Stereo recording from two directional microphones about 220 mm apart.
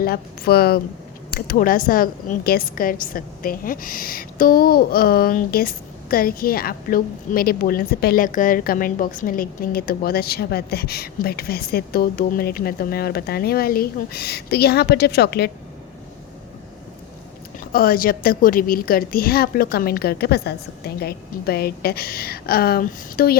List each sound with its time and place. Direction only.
0.0 s a woman's voice: 45° left (ahead or behind)
17.7 s a woman's voice: 40° left (ahead or behind)